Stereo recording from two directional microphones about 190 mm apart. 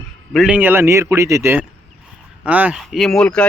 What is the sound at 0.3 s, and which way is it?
Speech, 5° right (ahead or behind).